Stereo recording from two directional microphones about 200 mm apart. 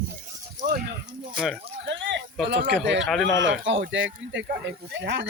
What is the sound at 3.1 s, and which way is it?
Speech, centre (ahead or behind).